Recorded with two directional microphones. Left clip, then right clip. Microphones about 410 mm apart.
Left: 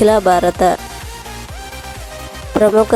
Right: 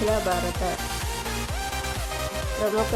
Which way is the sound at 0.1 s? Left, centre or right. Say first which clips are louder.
Left 13 dB; left.